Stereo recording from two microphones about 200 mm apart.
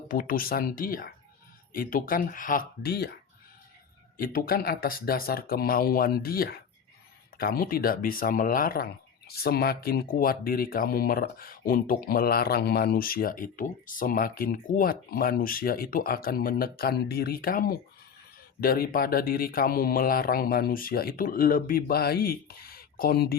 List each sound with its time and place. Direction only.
0.1 s speech: 45° left (ahead or behind)
4.2 s speech: 45° left (ahead or behind)